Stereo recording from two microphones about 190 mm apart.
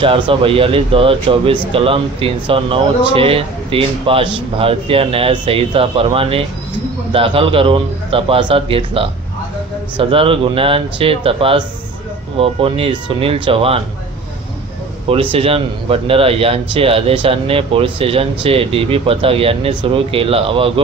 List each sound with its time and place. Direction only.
0.0 s speech: 25° right (ahead or behind)
15.3 s speech: 30° right (ahead or behind)